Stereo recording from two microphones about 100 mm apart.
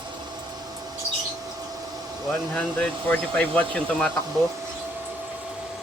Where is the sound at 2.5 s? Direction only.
15° left (ahead or behind).